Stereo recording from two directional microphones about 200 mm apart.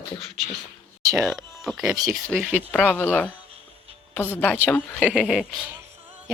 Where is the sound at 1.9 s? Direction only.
20° right (ahead or behind).